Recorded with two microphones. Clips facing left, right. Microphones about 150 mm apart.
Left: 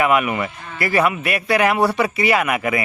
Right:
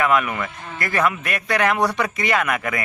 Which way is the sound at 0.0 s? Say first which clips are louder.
Left 2 dB; 10° left (ahead or behind).